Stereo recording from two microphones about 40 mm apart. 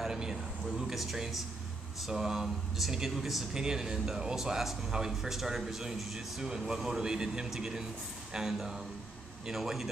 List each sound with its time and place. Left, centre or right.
0.0 s a sound: centre
0.9 s a man's voice: centre
4.4 s a man's voice: centre